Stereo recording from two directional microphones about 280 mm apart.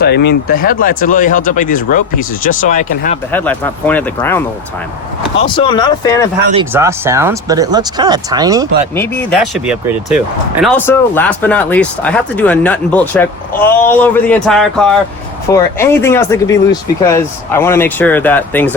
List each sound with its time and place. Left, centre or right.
0.0 s speech: left
3.3 s speech: centre
5.4 s speech: centre
6.7 s speech: centre
9.0 s speech: centre